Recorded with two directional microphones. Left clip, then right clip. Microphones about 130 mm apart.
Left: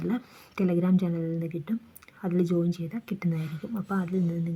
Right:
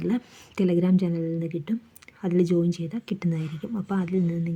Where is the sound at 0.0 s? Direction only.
15° right (ahead or behind).